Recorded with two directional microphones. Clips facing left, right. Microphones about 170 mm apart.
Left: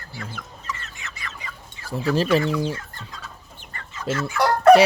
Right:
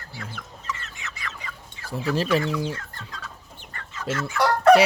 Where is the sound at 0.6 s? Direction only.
40° left (ahead or behind).